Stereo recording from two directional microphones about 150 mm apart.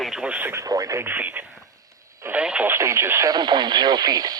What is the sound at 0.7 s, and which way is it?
Speech, 20° right (ahead or behind).